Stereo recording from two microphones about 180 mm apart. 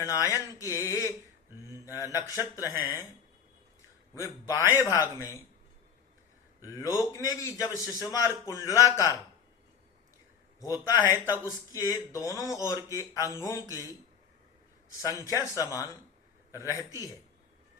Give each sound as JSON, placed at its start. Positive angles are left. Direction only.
{"t": 0.0, "sound": "a man's voice", "side_deg": 20}
{"t": 4.1, "sound": "speech", "side_deg": 15}
{"t": 6.6, "sound": "a man's voice", "side_deg": 20}
{"t": 10.6, "sound": "a man's voice", "side_deg": 20}
{"t": 15.0, "sound": "a man's voice", "side_deg": 20}